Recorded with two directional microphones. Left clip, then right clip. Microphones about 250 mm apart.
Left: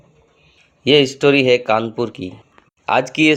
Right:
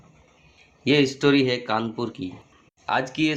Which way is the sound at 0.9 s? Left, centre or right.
Left.